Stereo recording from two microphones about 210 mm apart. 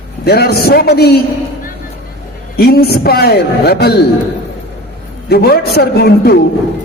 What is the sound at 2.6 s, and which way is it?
Speech, 50° left (ahead or behind).